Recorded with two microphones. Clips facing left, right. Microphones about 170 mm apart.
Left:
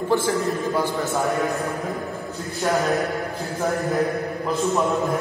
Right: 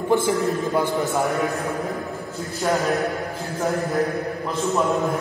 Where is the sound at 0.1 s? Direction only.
20° right (ahead or behind).